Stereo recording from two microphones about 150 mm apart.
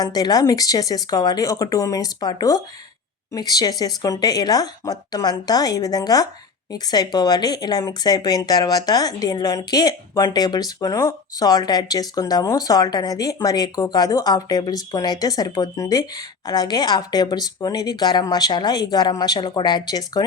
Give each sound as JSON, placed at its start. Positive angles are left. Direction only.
{"t": 0.0, "sound": "speech", "side_deg": 25}